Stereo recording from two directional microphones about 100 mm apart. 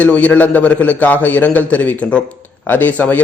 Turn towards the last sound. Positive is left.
turn(degrees=15)  # may be behind; listen again after turning